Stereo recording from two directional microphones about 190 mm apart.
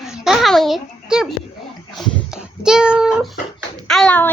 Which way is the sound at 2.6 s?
5° right (ahead or behind).